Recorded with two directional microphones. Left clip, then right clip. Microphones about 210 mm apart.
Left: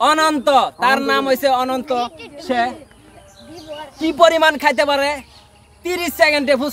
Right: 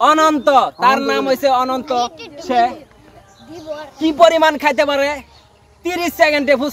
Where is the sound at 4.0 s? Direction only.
20° left (ahead or behind).